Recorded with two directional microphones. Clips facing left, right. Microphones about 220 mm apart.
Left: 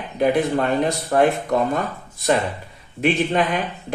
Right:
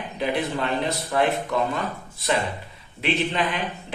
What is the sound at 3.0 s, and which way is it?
Speech, 50° left (ahead or behind).